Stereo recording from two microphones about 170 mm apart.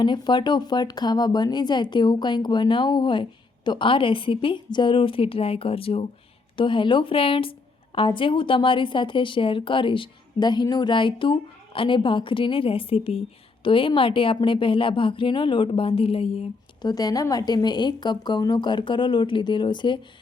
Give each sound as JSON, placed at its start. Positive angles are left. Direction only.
{"t": 0.0, "sound": "a woman's voice", "side_deg": 25}
{"t": 16.9, "sound": "speech", "side_deg": 20}